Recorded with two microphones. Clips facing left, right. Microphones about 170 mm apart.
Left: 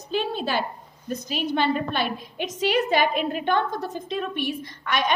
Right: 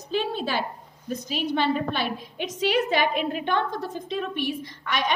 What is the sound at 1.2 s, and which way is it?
A woman's voice, 50° left (ahead or behind).